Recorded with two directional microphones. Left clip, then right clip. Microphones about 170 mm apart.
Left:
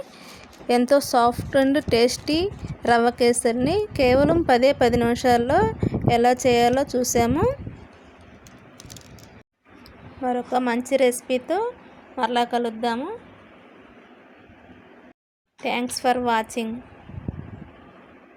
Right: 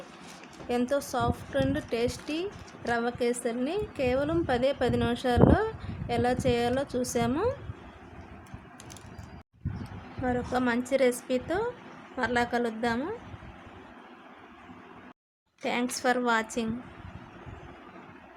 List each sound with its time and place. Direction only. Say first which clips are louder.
0.8 s a woman's voice: left 11 dB; 35° left (ahead or behind)
10.2 s a woman's voice: left 6 dB; 25° left (ahead or behind)
15.6 s a woman's voice: left 5 dB; 15° left (ahead or behind)